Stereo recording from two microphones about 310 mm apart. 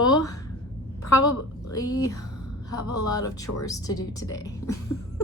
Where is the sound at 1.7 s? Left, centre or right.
Centre.